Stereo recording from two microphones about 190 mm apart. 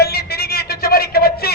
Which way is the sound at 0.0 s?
55° left (ahead or behind).